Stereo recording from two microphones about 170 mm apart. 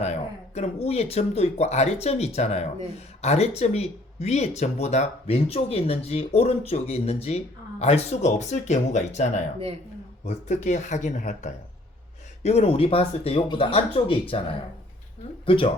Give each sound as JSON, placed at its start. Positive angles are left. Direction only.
{"t": 0.0, "sound": "speech", "side_deg": 40}
{"t": 15.4, "sound": "speech", "side_deg": 30}